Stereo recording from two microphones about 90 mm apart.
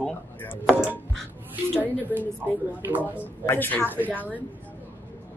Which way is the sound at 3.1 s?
25° left (ahead or behind).